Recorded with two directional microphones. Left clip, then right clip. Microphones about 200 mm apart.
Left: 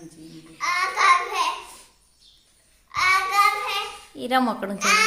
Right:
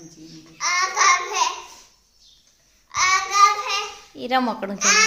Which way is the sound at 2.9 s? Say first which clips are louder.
Right 1 dB; 25° right (ahead or behind).